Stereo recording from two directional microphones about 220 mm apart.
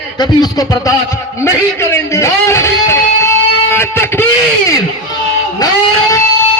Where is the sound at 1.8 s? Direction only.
10° left (ahead or behind).